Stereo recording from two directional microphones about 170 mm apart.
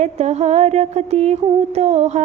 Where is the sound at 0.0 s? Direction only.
40° right (ahead or behind).